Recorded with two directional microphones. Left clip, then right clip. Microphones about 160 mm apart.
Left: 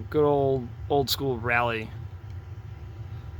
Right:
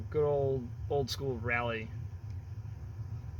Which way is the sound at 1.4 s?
50° left (ahead or behind).